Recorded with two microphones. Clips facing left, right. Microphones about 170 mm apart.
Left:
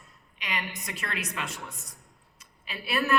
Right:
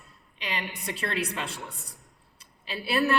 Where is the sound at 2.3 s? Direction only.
30° right (ahead or behind).